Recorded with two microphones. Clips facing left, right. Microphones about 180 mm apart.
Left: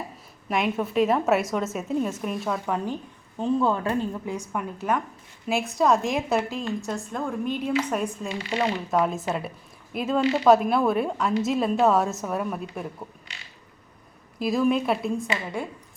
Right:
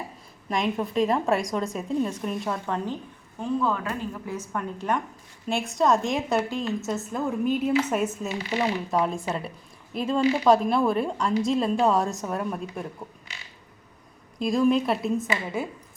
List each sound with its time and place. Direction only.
0.4 s a woman's voice: 5° left (ahead or behind)
3.6 s speech: 30° left (ahead or behind)
4.3 s a woman's voice: 10° left (ahead or behind)
14.3 s a woman's voice: 5° left (ahead or behind)